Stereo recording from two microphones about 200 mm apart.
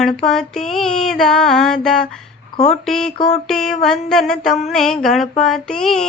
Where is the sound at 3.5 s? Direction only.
Centre (ahead or behind).